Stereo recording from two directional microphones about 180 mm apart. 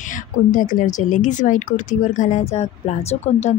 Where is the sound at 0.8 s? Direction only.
45° left (ahead or behind).